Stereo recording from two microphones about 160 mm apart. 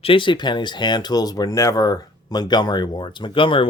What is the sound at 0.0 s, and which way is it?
Speech, 35° left (ahead or behind).